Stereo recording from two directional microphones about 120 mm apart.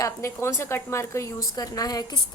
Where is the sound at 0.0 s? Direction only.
25° left (ahead or behind).